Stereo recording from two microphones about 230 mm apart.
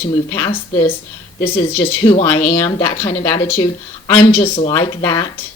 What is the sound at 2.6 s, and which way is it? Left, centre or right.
Speech, centre.